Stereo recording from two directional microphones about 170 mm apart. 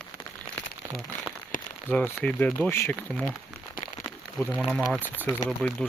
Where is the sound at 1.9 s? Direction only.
5° left (ahead or behind).